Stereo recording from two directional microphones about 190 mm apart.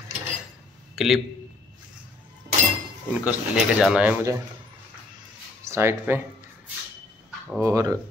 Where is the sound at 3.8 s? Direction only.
5° right (ahead or behind).